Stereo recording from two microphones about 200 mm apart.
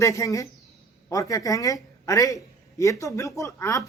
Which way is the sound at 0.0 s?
15° left (ahead or behind).